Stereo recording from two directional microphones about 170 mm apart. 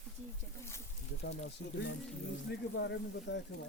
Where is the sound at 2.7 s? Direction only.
85° left.